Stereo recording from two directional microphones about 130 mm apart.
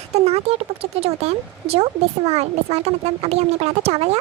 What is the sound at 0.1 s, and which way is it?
Speech, 55° right (ahead or behind).